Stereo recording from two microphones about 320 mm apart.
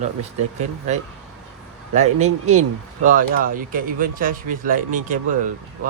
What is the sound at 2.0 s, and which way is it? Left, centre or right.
Speech, right.